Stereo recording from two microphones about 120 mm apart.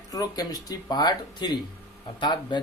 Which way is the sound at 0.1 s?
30° left (ahead or behind).